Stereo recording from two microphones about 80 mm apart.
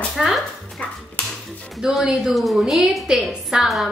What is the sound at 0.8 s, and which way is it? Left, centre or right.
Speech, centre.